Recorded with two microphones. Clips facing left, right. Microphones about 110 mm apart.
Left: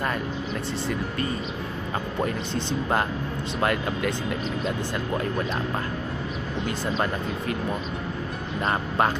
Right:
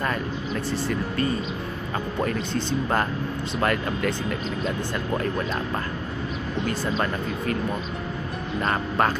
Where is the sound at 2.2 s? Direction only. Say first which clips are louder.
Right 2 dB; 20° left (ahead or behind).